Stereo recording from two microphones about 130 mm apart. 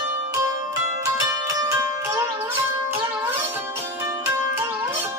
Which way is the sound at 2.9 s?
15° right (ahead or behind).